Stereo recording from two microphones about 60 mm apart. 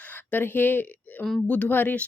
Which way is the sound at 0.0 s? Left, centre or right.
Left.